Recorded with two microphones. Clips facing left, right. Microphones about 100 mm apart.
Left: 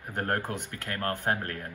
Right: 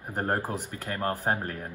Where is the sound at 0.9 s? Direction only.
15° right (ahead or behind).